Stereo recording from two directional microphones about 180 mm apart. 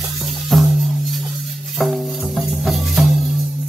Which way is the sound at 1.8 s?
Centre (ahead or behind).